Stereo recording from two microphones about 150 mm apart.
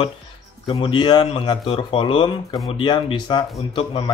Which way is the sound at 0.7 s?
35° left (ahead or behind).